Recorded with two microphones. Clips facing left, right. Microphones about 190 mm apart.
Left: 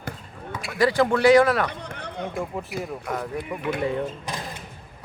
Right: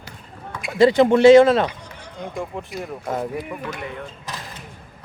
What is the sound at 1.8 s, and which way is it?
Chatter, 60° left (ahead or behind).